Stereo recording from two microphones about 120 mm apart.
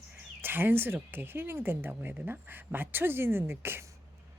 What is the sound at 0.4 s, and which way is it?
A woman's voice, 15° right (ahead or behind).